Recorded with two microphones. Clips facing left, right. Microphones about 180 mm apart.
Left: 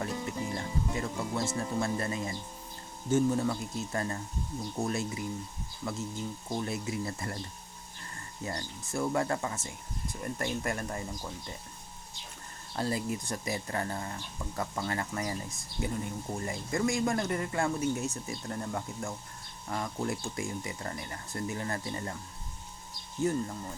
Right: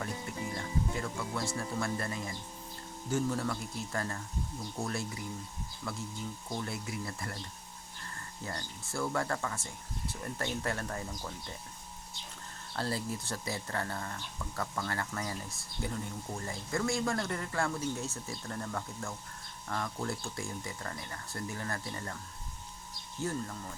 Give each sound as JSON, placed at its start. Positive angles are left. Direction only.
{"t": 0.5, "sound": "speech", "side_deg": 25}
{"t": 8.4, "sound": "speech", "side_deg": 20}
{"t": 12.7, "sound": "speech", "side_deg": 15}